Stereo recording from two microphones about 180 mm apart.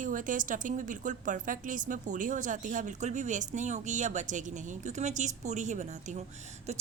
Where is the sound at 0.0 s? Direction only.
45° right (ahead or behind).